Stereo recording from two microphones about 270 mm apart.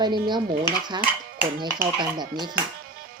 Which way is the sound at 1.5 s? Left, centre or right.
Centre.